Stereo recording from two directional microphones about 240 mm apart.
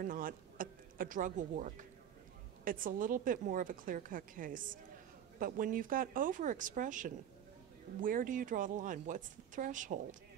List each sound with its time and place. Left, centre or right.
0.0 s a woman's voice: right